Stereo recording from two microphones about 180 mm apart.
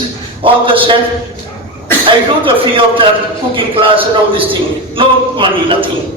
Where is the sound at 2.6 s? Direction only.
30° right (ahead or behind).